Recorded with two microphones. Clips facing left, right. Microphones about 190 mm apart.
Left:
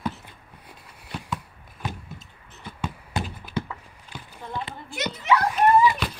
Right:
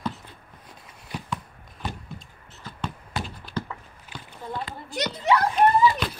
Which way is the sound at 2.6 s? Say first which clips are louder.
Left 1 dB; 15° left (ahead or behind).